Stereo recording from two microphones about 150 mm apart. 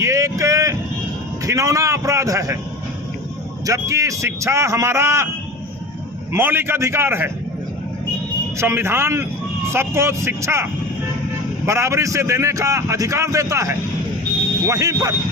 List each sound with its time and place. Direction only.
0.0 s a sound: 20° right (ahead or behind)
1.5 s a man's voice: 20° right (ahead or behind)
3.7 s a man's voice: 20° right (ahead or behind)
6.3 s speech: 15° right (ahead or behind)
8.5 s a man's voice: 15° right (ahead or behind)